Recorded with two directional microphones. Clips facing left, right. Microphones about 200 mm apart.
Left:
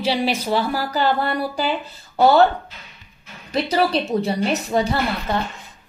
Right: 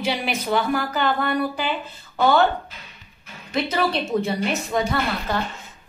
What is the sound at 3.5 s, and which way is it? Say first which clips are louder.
A woman's voice: left 3 dB; 35° left (ahead or behind).